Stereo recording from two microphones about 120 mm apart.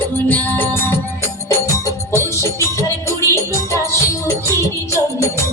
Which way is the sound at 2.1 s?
25° left (ahead or behind).